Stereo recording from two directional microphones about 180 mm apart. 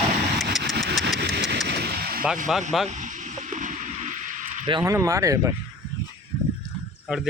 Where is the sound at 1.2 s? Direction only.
65° right (ahead or behind).